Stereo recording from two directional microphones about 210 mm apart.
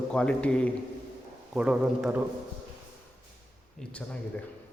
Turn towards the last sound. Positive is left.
turn(degrees=5)  # may be behind; listen again after turning